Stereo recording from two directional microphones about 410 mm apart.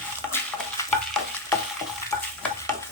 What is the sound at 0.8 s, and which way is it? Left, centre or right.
Stir, centre.